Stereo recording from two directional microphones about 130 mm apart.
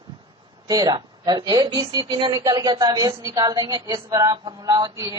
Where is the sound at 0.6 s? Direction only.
30° right (ahead or behind).